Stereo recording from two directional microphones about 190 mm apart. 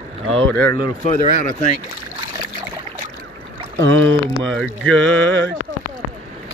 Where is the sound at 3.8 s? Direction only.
90° right.